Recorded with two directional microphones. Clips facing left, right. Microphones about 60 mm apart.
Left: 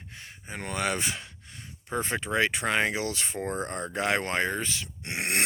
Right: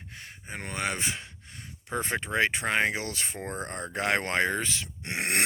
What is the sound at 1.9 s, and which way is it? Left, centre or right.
Speech, right.